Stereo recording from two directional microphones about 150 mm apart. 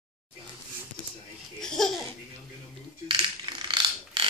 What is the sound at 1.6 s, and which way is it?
Laughter, 5° left (ahead or behind).